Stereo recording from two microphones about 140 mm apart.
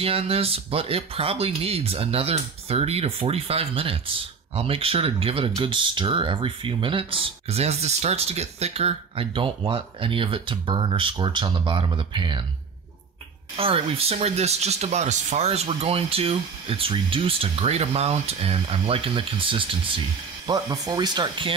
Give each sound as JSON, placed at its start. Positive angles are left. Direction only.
{"t": 0.0, "sound": "speech", "side_deg": -45}
{"t": 13.6, "sound": "speech", "side_deg": -45}
{"t": 20.4, "sound": "speech", "side_deg": -25}